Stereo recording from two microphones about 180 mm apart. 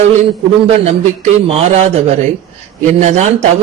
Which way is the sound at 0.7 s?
35° right (ahead or behind).